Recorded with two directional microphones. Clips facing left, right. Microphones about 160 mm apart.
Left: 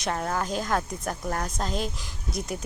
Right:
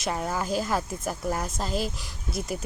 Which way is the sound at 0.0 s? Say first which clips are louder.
Left 1 dB; 5° right (ahead or behind).